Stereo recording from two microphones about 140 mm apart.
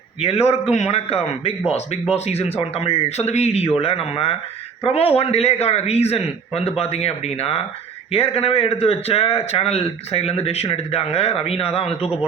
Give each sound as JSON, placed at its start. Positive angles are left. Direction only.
{"t": 0.2, "sound": "a man's voice", "side_deg": 45}